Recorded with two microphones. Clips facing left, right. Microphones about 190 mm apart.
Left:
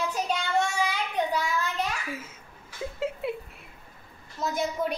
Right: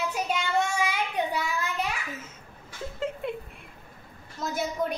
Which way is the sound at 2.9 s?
5° left (ahead or behind).